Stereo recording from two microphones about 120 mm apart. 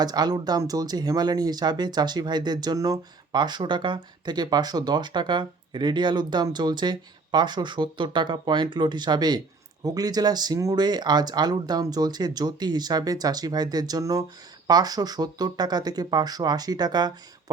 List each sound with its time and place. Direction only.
0.0 s speech: 35° right (ahead or behind)